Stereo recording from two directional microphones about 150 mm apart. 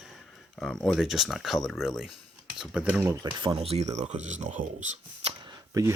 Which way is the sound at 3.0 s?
20° right (ahead or behind).